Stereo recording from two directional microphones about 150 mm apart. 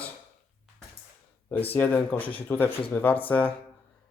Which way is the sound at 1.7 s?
10° left (ahead or behind).